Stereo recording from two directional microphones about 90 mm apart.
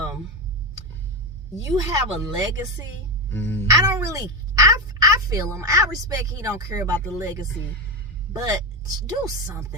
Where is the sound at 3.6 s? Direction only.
40° right (ahead or behind).